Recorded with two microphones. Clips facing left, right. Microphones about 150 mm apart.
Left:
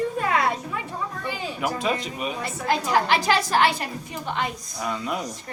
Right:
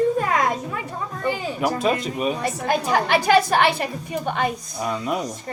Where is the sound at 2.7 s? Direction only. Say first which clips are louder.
Right 1 dB; 55° right (ahead or behind).